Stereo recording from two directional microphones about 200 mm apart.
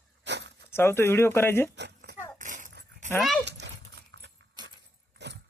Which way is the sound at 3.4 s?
60° right (ahead or behind).